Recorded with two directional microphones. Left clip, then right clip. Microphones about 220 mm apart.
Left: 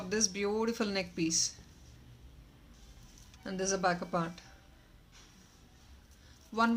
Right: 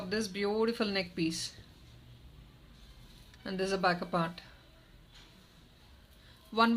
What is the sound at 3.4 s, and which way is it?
Speech, 5° right (ahead or behind).